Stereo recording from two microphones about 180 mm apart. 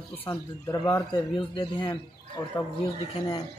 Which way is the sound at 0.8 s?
25° left (ahead or behind).